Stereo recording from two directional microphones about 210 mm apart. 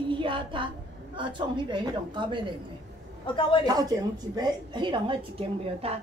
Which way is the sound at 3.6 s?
15° right (ahead or behind).